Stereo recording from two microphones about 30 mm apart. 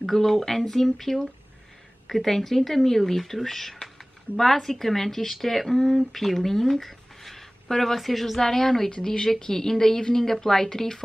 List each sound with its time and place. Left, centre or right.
0.0 s speech: centre
8.4 s speech: centre